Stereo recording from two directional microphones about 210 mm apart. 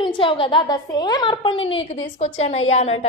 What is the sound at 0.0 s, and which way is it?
A woman's voice, 25° left (ahead or behind).